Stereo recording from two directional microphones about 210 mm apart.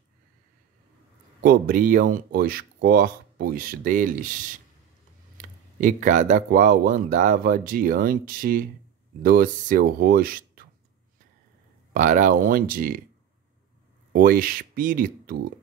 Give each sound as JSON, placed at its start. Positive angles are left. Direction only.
{"t": 1.4, "sound": "speech", "side_deg": -40}
{"t": 5.8, "sound": "speech", "side_deg": -40}
{"t": 11.9, "sound": "speech", "side_deg": -40}
{"t": 14.1, "sound": "speech", "side_deg": -45}